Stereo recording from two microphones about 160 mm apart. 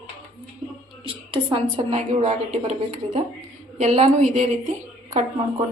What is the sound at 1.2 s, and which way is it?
A woman's voice, 30° right (ahead or behind).